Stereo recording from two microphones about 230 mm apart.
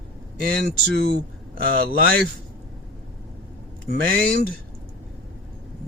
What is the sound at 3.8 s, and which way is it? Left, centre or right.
Speech, right.